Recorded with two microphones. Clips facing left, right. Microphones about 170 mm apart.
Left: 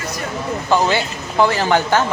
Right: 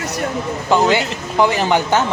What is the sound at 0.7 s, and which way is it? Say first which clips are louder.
Speech: right 2 dB; 15° right (ahead or behind).